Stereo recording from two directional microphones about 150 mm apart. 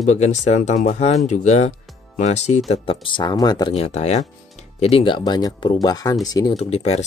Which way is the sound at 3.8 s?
45° left (ahead or behind).